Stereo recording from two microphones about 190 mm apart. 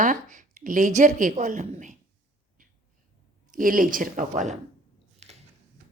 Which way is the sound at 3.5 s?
45° right (ahead or behind).